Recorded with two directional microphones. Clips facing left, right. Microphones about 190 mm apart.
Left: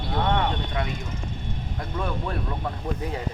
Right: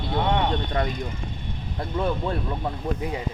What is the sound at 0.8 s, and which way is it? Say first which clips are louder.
Speech: right 4 dB; 40° right (ahead or behind).